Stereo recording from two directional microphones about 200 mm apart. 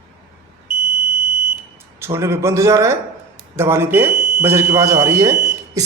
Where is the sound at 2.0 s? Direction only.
15° right (ahead or behind).